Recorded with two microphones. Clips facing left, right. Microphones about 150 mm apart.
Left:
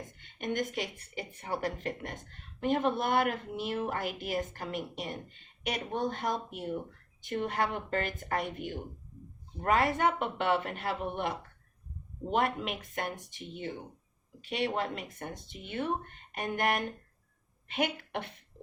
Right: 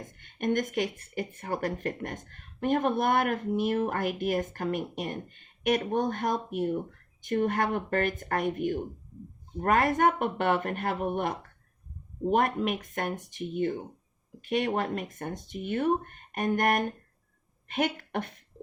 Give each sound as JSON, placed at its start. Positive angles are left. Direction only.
{"t": 0.2, "sound": "speech", "side_deg": -50}